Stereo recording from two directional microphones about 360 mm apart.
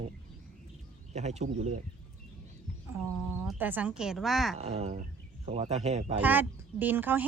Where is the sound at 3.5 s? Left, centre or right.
Centre.